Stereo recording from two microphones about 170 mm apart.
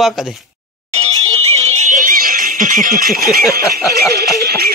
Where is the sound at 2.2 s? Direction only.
55° right (ahead or behind).